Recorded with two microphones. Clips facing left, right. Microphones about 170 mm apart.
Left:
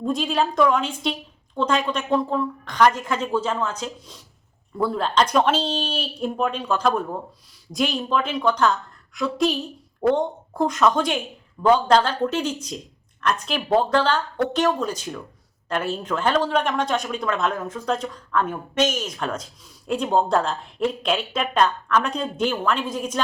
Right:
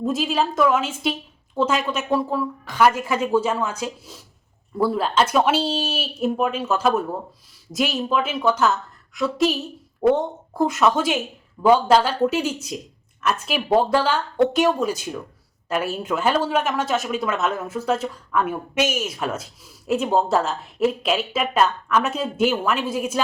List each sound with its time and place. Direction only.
0.0 s a woman's voice: 5° right (ahead or behind)